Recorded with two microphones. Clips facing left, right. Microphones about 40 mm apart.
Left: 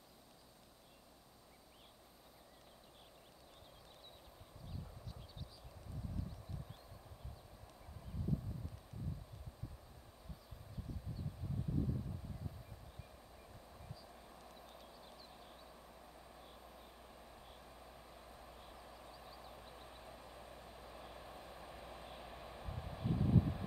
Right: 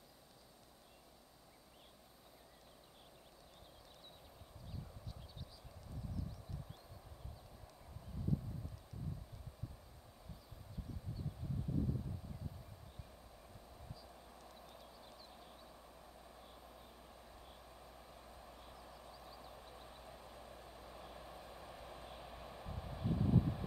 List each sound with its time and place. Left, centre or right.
14.0 s vehicle: centre